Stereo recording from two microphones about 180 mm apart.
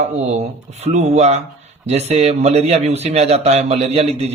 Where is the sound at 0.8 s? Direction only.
40° right (ahead or behind).